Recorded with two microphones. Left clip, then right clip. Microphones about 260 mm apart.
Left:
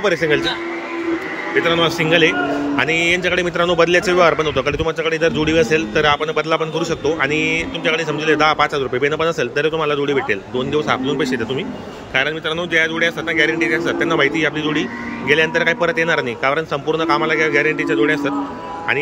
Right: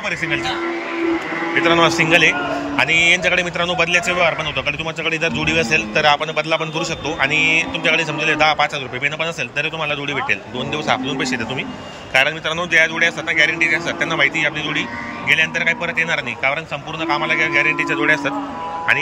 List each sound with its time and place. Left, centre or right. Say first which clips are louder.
0.0 s a man's voice: left 5 dB; centre
1.5 s a man's voice: right 2 dB; centre